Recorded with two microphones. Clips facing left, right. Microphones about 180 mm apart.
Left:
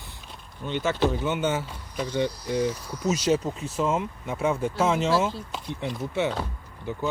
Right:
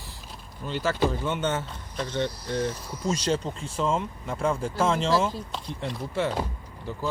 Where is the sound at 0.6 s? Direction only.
Centre (ahead or behind).